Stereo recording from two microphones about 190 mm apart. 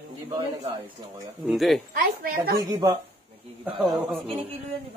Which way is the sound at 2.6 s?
20° right (ahead or behind).